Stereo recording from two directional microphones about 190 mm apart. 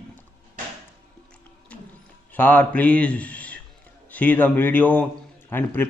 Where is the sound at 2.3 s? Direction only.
10° left (ahead or behind).